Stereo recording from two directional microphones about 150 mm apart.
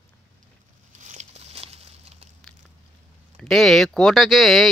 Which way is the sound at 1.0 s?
50° right (ahead or behind).